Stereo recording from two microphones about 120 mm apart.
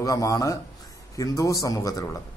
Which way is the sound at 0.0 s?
30° left (ahead or behind).